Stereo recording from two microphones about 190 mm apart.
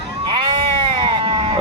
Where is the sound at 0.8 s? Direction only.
25° right (ahead or behind).